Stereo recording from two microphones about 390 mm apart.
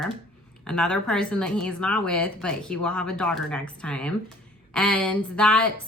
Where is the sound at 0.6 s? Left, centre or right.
Centre.